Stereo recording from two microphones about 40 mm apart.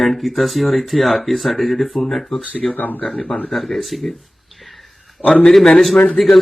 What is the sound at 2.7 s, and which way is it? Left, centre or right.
Speech, left.